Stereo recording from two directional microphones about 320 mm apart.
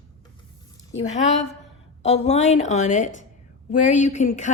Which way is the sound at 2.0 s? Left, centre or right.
Centre.